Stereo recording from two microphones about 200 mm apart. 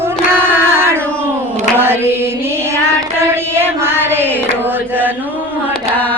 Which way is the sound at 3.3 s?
10° right (ahead or behind).